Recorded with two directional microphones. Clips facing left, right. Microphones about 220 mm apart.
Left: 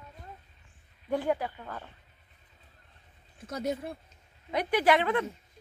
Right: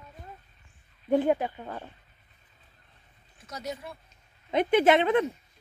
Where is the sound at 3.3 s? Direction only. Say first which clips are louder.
Left 5 dB; 55° left (ahead or behind).